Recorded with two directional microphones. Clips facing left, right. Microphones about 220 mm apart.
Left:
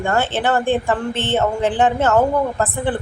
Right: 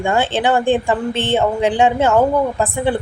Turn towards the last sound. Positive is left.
turn(degrees=-10)  # may be behind; listen again after turning